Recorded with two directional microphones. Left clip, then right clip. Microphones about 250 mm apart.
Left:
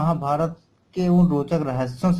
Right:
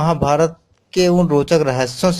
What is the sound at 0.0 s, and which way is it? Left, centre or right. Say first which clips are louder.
Speech: right 7 dB; right.